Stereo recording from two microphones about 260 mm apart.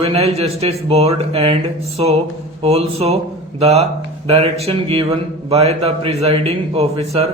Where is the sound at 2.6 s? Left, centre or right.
Right.